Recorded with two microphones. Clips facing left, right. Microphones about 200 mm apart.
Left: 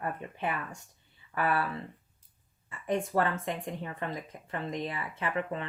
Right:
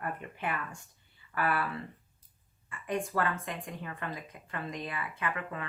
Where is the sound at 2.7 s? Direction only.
25° left (ahead or behind).